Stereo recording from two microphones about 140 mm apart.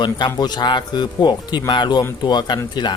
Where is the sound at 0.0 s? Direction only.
30° left (ahead or behind).